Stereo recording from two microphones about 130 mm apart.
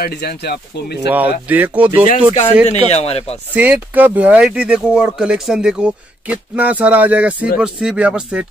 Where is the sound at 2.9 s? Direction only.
50° left (ahead or behind).